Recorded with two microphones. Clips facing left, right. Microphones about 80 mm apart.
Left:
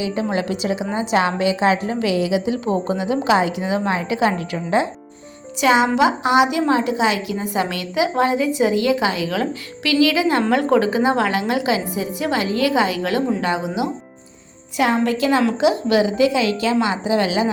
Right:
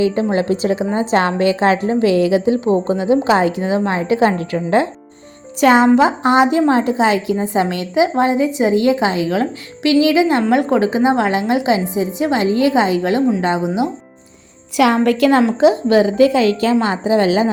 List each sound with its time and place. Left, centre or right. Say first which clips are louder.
0.3 s a woman's voice: right 5 dB; right
15.0 s a woman's voice: right 5 dB; right
15.4 s speech: right 4 dB; right